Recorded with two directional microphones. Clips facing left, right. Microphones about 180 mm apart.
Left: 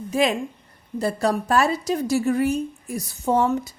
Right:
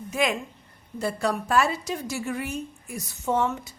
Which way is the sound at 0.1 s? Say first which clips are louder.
Left 5 dB; 30° left (ahead or behind).